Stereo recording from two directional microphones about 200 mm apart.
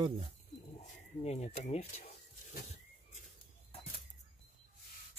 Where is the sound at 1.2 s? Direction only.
35° left (ahead or behind).